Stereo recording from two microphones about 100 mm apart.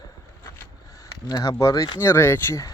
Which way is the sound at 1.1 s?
35° left (ahead or behind).